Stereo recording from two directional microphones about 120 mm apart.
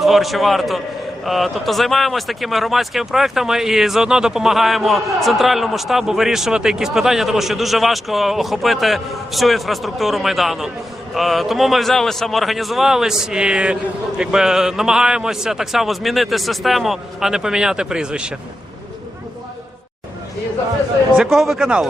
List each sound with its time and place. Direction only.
0.0 s speech: centre (ahead or behind)
21.2 s speech: centre (ahead or behind)